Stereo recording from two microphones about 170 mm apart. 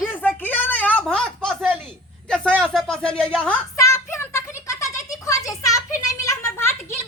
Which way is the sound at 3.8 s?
15° left (ahead or behind).